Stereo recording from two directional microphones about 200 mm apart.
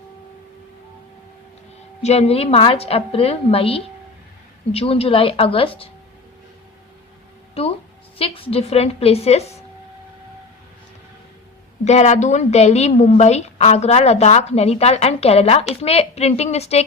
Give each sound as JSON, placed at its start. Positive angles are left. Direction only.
{"t": 2.0, "sound": "a woman's voice", "side_deg": 30}
{"t": 7.6, "sound": "music", "side_deg": 30}
{"t": 8.2, "sound": "a woman's voice", "side_deg": 30}
{"t": 11.9, "sound": "a woman's voice", "side_deg": 35}